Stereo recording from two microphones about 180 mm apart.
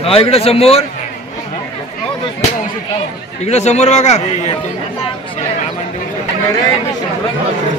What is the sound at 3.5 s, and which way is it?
A man's voice, 40° left (ahead or behind).